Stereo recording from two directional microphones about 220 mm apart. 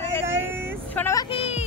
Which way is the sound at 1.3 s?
25° left (ahead or behind).